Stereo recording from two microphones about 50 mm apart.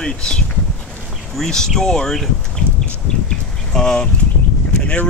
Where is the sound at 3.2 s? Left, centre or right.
Centre.